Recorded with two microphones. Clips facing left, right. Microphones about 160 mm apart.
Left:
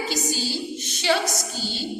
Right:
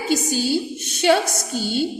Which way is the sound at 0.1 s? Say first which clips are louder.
Right 7 dB; 55° right (ahead or behind).